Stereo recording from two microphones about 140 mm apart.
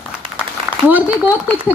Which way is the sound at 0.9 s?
10° right (ahead or behind).